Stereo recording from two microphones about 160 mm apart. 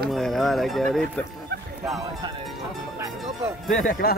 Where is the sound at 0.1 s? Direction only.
Centre (ahead or behind).